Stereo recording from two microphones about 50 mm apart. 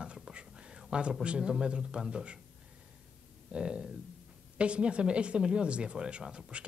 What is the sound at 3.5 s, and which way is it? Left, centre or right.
Speech, centre.